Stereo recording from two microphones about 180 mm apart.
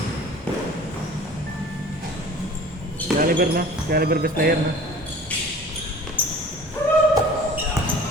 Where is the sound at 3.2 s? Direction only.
55° right (ahead or behind).